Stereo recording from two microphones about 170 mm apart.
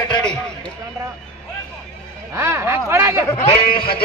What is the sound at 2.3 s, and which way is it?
Speech, 15° right (ahead or behind).